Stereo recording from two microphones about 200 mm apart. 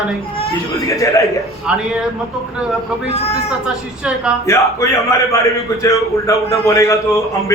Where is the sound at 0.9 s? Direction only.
15° left (ahead or behind).